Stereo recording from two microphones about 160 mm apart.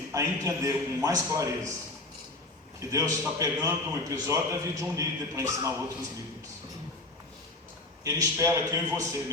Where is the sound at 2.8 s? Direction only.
20° right (ahead or behind).